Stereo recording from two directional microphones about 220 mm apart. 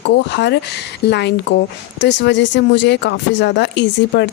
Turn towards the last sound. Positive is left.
turn(degrees=50)  # may be behind; listen again after turning